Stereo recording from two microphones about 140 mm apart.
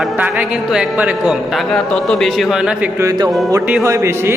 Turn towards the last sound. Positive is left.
turn(degrees=-20)  # may be behind; listen again after turning